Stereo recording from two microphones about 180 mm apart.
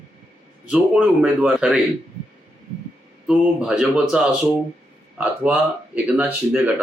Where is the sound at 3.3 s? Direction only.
5° right (ahead or behind).